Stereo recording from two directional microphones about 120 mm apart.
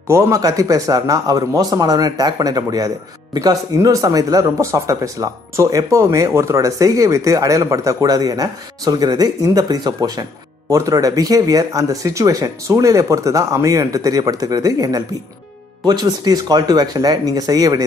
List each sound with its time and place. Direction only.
0.1 s speech: 25° right (ahead or behind)